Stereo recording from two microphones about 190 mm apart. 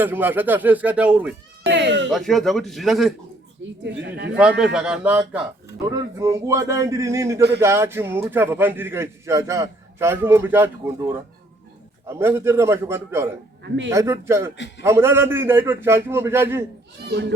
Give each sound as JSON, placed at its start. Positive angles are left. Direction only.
{"t": 0.0, "sound": "a man's voice", "side_deg": -10}
{"t": 1.6, "sound": "cat", "side_deg": -65}
{"t": 2.0, "sound": "a man's voice", "side_deg": 0}
{"t": 3.6, "sound": "a woman's voice", "side_deg": -75}
{"t": 4.3, "sound": "a man's voice", "side_deg": -5}
{"t": 12.0, "sound": "a man's voice", "side_deg": -15}
{"t": 14.5, "sound": "a man's voice", "side_deg": 70}
{"t": 14.8, "sound": "a man's voice", "side_deg": -15}
{"t": 17.1, "sound": "a child's voice", "side_deg": -65}